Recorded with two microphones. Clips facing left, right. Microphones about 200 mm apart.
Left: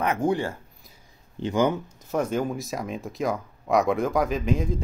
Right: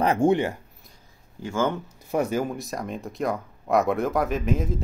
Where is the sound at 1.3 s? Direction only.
20° left (ahead or behind).